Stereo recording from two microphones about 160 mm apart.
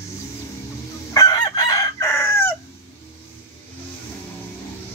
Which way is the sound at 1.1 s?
20° left (ahead or behind).